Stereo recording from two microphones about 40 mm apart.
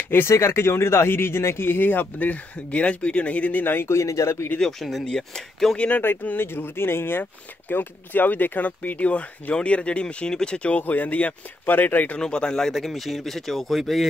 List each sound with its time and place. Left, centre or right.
0.1 s speech: left
3.5 s speech: left
4.6 s speech: centre
5.0 s speech: centre
5.8 s speech: left
6.0 s speech: left
9.1 s speech: left
10.8 s speech: left
11.7 s speech: left
12.2 s speech: left
12.7 s speech: centre